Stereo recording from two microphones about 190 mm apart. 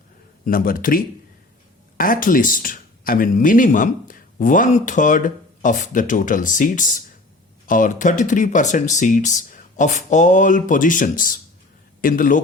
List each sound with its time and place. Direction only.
0.4 s speech: 50° left (ahead or behind)